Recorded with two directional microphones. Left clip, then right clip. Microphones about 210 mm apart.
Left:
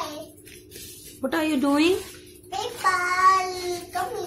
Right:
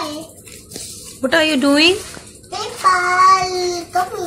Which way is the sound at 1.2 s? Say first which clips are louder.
Right 10 dB; 5° right (ahead or behind).